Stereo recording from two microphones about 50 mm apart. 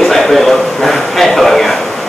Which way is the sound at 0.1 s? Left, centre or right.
Centre.